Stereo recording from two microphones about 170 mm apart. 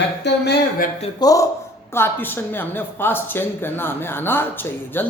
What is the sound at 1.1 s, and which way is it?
Speech, 20° left (ahead or behind).